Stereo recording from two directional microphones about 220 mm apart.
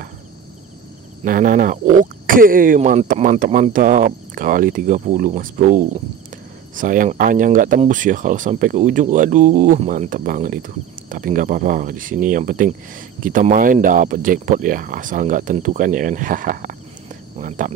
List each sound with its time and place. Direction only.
1.2 s speech: 35° right (ahead or behind)